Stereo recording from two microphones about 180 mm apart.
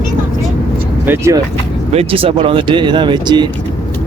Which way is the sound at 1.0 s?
15° right (ahead or behind).